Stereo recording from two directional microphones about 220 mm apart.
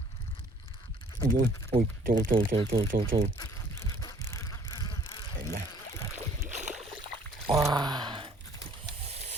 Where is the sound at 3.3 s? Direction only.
15° left (ahead or behind).